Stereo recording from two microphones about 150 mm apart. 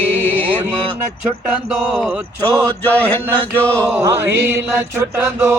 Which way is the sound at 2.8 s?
15° left (ahead or behind).